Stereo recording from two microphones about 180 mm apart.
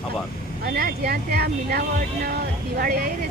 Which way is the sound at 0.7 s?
60° right (ahead or behind).